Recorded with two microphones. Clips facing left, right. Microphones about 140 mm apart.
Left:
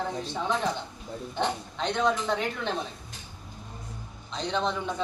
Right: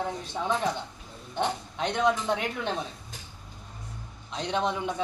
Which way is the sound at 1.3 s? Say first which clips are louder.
Right 1 dB; 10° right (ahead or behind).